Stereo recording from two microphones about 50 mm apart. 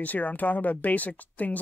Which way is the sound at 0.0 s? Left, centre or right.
Left.